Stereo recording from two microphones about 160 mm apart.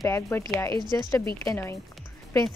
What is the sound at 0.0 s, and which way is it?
Speech, 15° left (ahead or behind).